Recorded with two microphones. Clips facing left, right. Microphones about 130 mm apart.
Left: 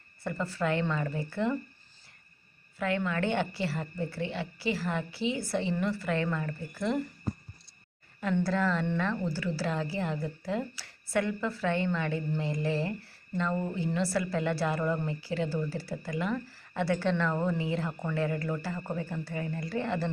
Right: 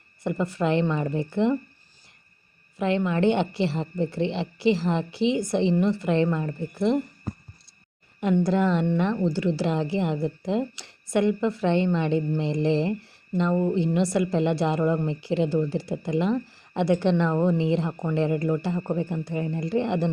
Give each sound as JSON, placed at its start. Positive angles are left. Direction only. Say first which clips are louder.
{"t": 0.2, "sound": "speech", "louder": "right 6 dB", "side_deg": -15}
{"t": 2.7, "sound": "speech", "louder": "right 6 dB", "side_deg": -20}
{"t": 8.2, "sound": "speech", "louder": "right 6 dB", "side_deg": -15}